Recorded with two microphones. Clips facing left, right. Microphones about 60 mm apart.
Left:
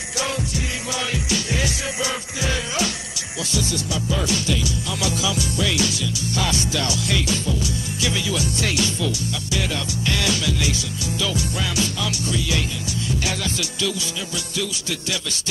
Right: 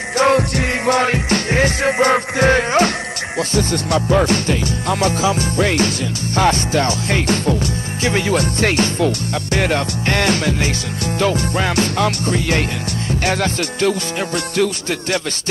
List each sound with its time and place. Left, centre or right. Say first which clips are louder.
0.2 s music: right 12 dB; right